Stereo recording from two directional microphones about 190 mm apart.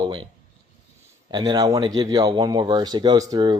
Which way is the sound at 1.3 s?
20° right (ahead or behind).